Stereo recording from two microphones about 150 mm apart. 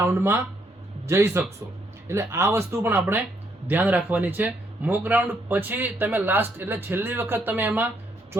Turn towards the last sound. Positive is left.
turn(degrees=-10)  # may be behind; listen again after turning